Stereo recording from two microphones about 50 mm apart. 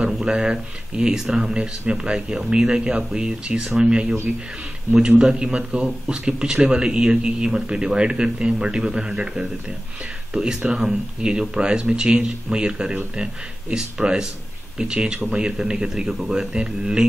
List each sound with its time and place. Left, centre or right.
0.0 s speech: centre